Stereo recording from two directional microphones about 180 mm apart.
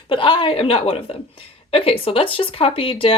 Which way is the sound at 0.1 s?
30° left (ahead or behind).